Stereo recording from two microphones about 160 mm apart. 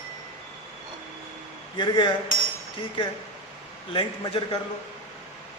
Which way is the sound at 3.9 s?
35° left (ahead or behind).